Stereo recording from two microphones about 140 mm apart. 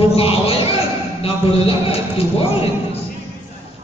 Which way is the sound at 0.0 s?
40° left (ahead or behind).